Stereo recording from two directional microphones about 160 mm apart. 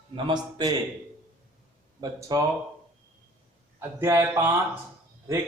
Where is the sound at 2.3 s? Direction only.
25° right (ahead or behind).